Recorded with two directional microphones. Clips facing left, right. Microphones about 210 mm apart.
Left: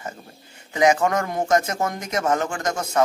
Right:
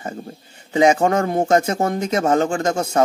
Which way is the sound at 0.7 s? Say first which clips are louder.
Right 4 dB; 30° right (ahead or behind).